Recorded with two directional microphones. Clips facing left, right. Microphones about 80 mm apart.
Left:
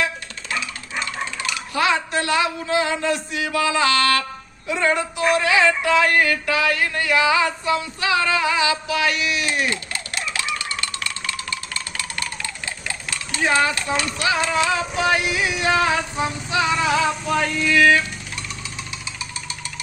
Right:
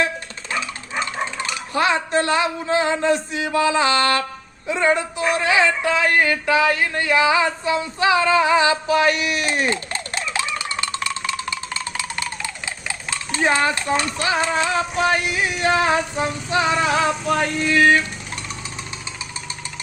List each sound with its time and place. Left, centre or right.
1.1 s speech: right
4.7 s synthetic singing: right
9.5 s a sound: right
15.3 s music: right
15.7 s vehicle: right
16.7 s vehicle: right